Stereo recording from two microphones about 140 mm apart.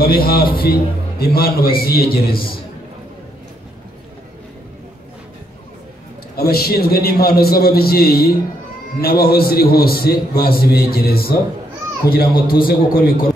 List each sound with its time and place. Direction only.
0.0 s a man's voice: 90° left
6.3 s a man's voice: 90° left